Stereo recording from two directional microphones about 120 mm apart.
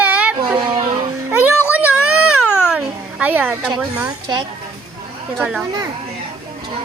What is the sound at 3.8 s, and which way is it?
Speech, 10° right (ahead or behind).